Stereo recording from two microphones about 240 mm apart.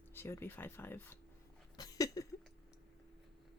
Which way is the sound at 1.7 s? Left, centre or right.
Centre.